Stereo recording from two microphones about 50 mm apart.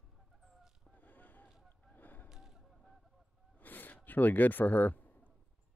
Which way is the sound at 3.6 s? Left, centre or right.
Left.